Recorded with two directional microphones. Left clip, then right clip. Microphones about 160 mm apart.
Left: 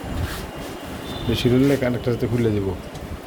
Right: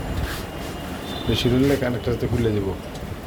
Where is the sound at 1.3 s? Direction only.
35° left (ahead or behind).